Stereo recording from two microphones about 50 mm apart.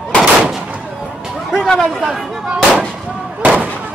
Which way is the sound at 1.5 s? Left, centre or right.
Centre.